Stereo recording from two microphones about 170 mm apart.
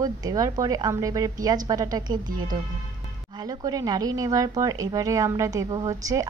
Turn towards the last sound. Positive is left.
turn(degrees=-20)  # may be behind; listen again after turning